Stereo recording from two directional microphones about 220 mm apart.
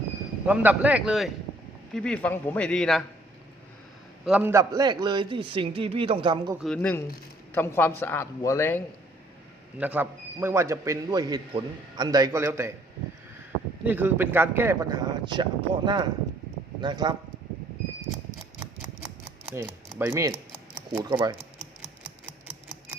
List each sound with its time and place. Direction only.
0.4 s a man's voice: 5° right (ahead or behind)
4.3 s a man's voice: 10° right (ahead or behind)
6.6 s a man's voice: 5° left (ahead or behind)
9.7 s a man's voice: 5° right (ahead or behind)
13.8 s a man's voice: 10° right (ahead or behind)
19.5 s a man's voice: 10° right (ahead or behind)